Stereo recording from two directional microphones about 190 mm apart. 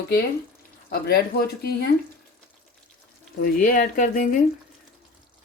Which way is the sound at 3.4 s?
45° left (ahead or behind).